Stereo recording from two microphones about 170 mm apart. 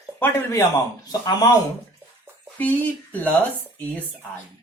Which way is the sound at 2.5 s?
10° left (ahead or behind).